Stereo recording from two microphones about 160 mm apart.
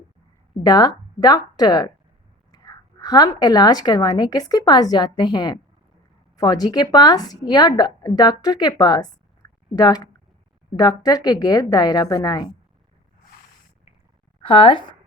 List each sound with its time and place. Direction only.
0.6 s a woman's voice: 25° left (ahead or behind)
14.4 s speech: 30° left (ahead or behind)